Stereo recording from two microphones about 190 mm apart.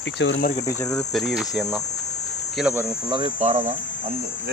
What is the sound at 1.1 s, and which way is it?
Speech, centre (ahead or behind).